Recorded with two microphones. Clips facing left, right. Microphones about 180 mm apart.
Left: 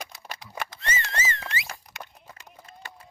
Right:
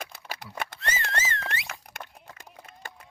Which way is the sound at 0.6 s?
Centre (ahead or behind).